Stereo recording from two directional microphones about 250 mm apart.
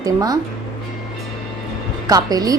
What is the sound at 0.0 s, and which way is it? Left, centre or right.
Speech, centre.